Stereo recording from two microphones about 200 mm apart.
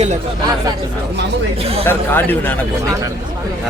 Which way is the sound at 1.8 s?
10° left (ahead or behind).